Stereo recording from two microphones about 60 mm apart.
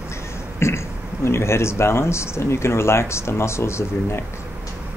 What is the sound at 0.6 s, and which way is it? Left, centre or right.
Speech, left.